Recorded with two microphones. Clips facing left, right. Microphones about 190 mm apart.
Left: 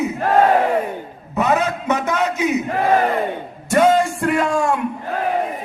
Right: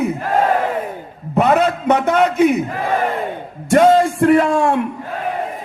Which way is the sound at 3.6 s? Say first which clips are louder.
Right 3 dB; 25° right (ahead or behind).